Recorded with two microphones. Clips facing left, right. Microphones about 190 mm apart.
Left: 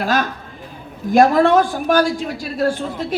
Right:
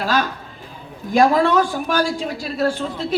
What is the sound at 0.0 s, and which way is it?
A woman's voice, 50° left (ahead or behind).